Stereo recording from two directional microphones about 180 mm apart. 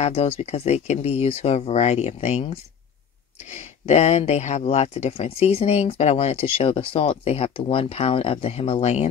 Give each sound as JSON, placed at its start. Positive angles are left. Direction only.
{"t": 0.0, "sound": "speech", "side_deg": 35}